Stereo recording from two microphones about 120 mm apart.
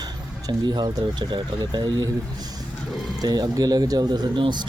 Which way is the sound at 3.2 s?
35° right (ahead or behind).